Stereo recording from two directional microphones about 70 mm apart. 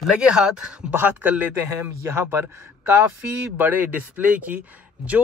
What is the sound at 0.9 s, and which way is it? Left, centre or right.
Speech, right.